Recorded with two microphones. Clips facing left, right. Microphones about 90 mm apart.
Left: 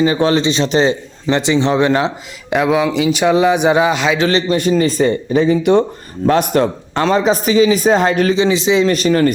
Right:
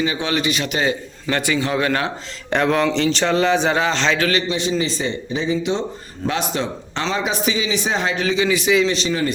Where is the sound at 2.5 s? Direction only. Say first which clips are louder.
Left 3 dB; 5° left (ahead or behind).